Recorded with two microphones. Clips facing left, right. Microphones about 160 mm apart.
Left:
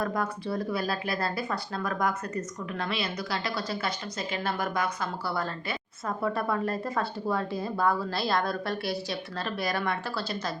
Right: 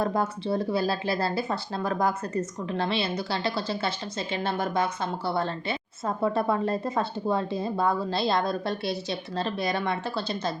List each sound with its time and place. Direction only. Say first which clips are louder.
0.0 s speech: right 3 dB; 25° right (ahead or behind)